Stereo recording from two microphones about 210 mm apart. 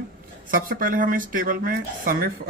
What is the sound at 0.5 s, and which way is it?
Speech, 40° right (ahead or behind).